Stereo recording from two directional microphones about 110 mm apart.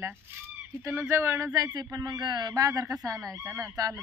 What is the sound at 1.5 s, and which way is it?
Speech, 35° right (ahead or behind).